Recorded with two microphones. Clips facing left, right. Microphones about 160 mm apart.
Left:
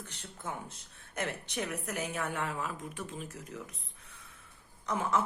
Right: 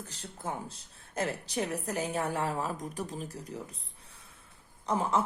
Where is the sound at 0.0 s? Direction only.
35° right (ahead or behind).